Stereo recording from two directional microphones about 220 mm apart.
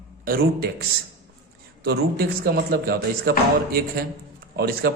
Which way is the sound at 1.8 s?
45° right (ahead or behind).